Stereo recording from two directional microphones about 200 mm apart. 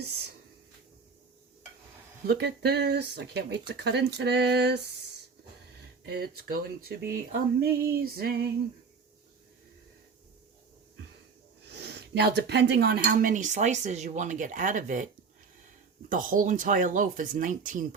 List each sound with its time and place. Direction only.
2.2 s speech: 50° right (ahead or behind)
6.1 s a sound: 50° right (ahead or behind)
11.7 s speech: 55° right (ahead or behind); by 15.0 s 40° right (ahead or behind)
16.0 s speech: 45° right (ahead or behind)